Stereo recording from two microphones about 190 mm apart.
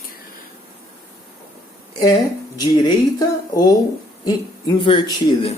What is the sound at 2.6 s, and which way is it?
Speech, 20° left (ahead or behind).